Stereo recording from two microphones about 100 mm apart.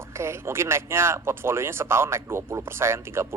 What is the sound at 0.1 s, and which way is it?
A man's voice, 25° right (ahead or behind).